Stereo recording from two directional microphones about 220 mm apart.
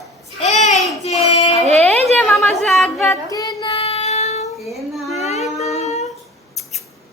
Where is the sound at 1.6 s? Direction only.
30° right (ahead or behind).